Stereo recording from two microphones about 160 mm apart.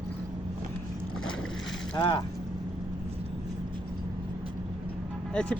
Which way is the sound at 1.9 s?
30° left (ahead or behind).